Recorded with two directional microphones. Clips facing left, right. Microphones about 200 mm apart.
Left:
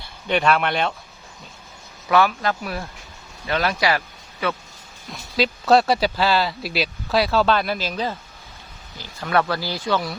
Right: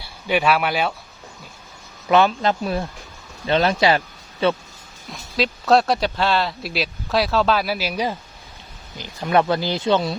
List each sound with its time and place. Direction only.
0.0 s speech: 5° right (ahead or behind)
2.0 s speech: 25° right (ahead or behind)
5.1 s speech: centre (ahead or behind); by 10.2 s 25° right (ahead or behind)